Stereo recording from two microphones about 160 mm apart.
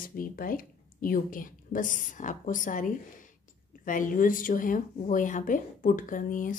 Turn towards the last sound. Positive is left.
turn(degrees=55)  # may be behind; listen again after turning